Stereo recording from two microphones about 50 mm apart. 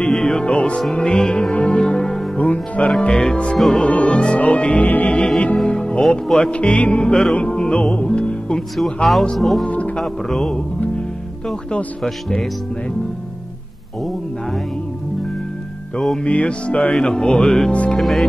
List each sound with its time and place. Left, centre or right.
0.1 s music: centre
2.3 s music: left
3.0 s music: centre
4.8 s music: left
5.1 s music: centre
6.0 s speech: centre
6.5 s music: left
8.5 s speech: centre
9.7 s music: left
9.9 s speech: centre
16.3 s music: left
16.9 s speech: centre